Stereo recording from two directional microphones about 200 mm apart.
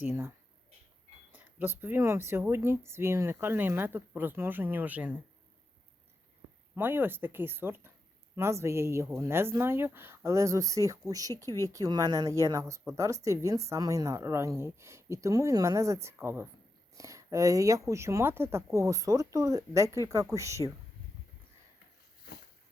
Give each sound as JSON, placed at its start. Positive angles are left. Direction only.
{"t": 0.0, "sound": "speech", "side_deg": -10}
{"t": 6.7, "sound": "speech", "side_deg": -10}